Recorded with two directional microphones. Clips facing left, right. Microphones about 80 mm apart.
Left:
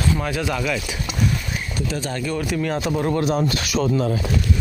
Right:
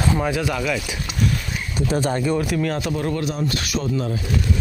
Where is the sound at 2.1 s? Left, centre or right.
Right.